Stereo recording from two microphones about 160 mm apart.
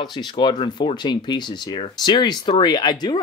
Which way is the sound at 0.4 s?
30° left (ahead or behind).